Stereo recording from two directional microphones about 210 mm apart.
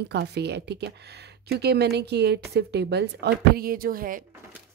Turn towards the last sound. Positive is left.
turn(degrees=-40)  # may be behind; listen again after turning